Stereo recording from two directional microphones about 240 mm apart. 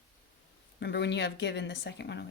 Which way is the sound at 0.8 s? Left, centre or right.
Left.